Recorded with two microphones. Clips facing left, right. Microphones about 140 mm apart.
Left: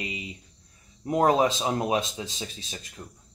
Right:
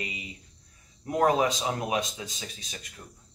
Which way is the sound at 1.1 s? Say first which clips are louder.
Left 2 dB; 30° left (ahead or behind).